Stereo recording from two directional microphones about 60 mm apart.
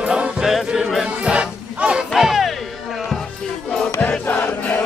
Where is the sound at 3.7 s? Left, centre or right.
Centre.